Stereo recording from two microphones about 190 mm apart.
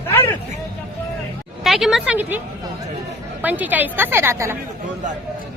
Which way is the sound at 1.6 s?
Centre (ahead or behind).